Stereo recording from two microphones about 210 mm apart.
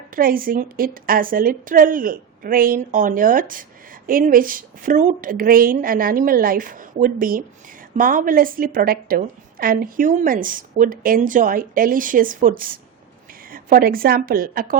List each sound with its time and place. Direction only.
0.2 s a woman's voice: 45° right (ahead or behind)